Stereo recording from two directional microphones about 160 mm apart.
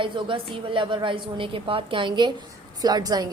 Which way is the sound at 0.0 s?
30° right (ahead or behind).